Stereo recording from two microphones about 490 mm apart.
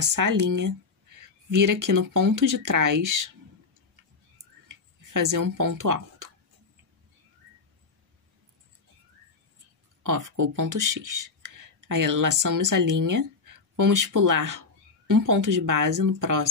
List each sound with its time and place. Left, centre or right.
0.0 s speech: right
4.6 s a sound: right
10.0 s speech: right